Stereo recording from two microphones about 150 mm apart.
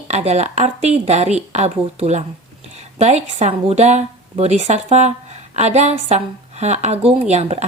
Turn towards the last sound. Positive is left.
turn(degrees=-45)  # may be behind; listen again after turning